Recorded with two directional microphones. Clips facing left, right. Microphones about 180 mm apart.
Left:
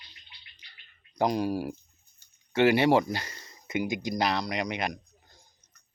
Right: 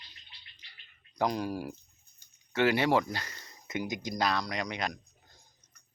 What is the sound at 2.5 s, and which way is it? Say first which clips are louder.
Speech: left 4 dB; 25° left (ahead or behind).